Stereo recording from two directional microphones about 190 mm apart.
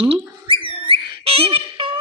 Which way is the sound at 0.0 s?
30° right (ahead or behind).